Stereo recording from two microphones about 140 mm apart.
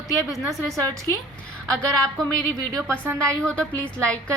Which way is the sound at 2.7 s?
20° right (ahead or behind).